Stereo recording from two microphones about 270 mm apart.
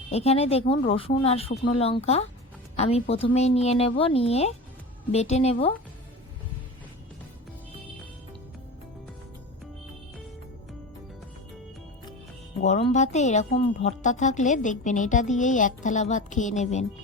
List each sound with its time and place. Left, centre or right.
0.1 s speech: left
12.6 s speech: left